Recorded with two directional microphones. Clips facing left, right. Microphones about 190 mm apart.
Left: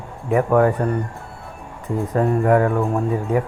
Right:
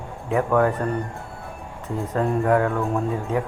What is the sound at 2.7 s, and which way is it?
Speech, 15° left (ahead or behind).